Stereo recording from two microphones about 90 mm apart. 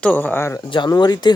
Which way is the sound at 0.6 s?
65° left (ahead or behind).